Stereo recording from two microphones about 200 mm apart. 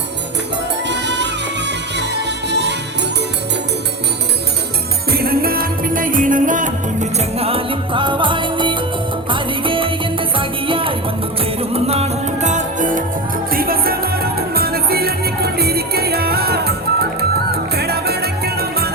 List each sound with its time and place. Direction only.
0.9 s music: 60° right (ahead or behind)
2.5 s music: 60° right (ahead or behind)
5.1 s music: 50° right (ahead or behind)